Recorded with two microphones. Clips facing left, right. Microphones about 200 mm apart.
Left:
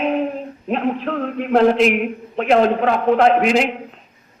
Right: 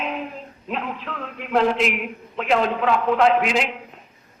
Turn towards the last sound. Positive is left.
turn(degrees=50)  # may be behind; listen again after turning